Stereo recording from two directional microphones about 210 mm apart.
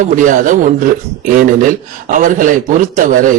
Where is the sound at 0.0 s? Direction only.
35° right (ahead or behind).